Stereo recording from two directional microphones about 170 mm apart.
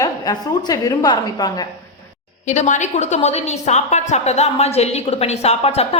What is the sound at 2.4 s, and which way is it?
A woman's voice, 45° left (ahead or behind).